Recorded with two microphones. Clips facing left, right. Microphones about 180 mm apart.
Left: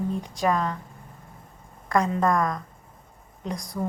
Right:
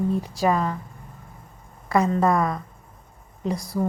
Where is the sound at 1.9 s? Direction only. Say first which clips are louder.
Right 2 dB; 5° right (ahead or behind).